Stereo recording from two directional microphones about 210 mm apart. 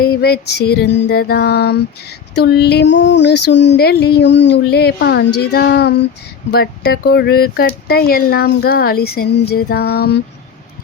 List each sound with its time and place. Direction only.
0.0 s female singing: 50° left (ahead or behind)